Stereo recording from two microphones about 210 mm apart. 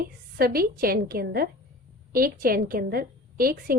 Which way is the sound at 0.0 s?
45° right (ahead or behind).